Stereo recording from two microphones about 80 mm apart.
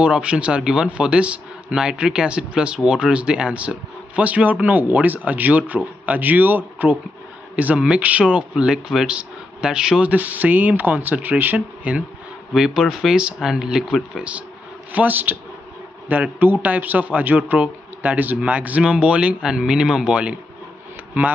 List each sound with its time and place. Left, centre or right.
0.0 s a man's voice: centre
14.9 s a man's voice: right